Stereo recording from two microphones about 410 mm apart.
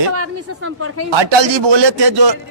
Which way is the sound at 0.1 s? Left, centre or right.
Right.